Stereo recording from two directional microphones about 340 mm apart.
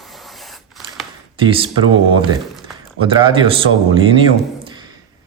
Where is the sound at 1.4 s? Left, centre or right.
Centre.